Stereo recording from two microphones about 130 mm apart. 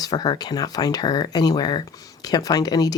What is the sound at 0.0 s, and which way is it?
Speech, 30° left (ahead or behind).